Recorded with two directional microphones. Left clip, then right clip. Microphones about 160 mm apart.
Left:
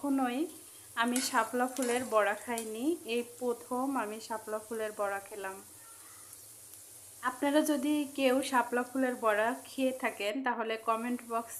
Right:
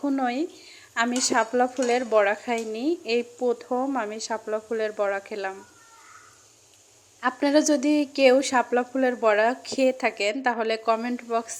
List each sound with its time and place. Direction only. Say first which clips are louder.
0.0 s speech: right 7 dB; 20° right (ahead or behind)
7.2 s speech: right 8 dB; 30° right (ahead or behind)